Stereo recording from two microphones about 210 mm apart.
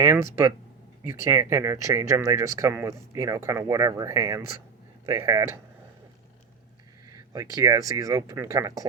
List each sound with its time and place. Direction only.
0.0 s speech: 15° right (ahead or behind)
7.5 s speech: 15° right (ahead or behind)